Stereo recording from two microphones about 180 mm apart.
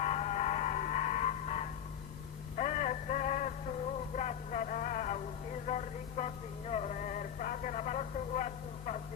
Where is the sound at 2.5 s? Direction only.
40° left (ahead or behind).